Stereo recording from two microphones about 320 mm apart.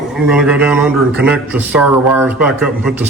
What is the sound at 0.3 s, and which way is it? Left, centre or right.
A man's voice, centre.